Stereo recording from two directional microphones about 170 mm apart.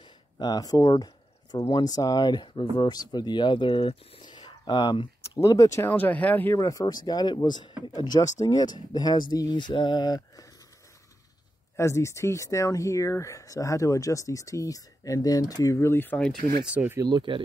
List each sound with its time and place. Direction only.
0.4 s speech: 25° left (ahead or behind)
11.7 s speech: 15° left (ahead or behind)
16.3 s speech: 65° right (ahead or behind)
16.6 s speech: 10° right (ahead or behind)
17.0 s speech: 25° right (ahead or behind)